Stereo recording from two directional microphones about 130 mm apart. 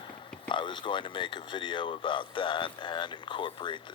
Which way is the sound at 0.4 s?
35° left (ahead or behind).